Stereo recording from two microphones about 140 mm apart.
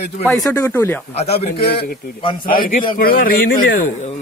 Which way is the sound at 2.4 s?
90° left.